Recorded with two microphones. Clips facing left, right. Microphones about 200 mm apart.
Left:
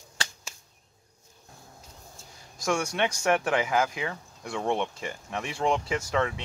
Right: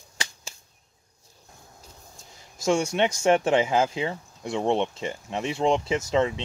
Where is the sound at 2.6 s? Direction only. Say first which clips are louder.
Right 4 dB; 25° right (ahead or behind).